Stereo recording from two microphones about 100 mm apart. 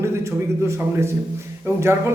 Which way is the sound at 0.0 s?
25° right (ahead or behind).